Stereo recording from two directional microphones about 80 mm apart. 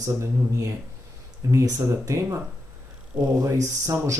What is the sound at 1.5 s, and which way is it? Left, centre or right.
Speech, right.